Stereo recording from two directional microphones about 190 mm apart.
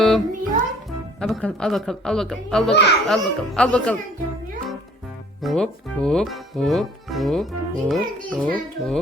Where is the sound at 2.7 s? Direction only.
65° left (ahead or behind).